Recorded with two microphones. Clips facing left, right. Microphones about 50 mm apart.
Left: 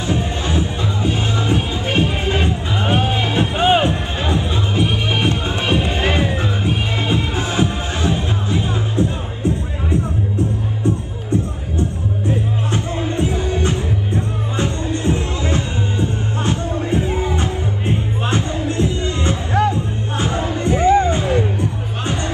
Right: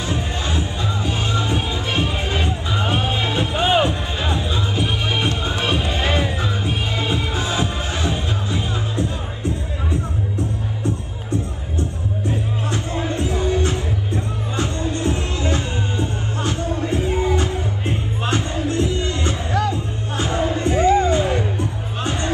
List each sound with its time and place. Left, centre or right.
1.0 s music: left
12.7 s music: left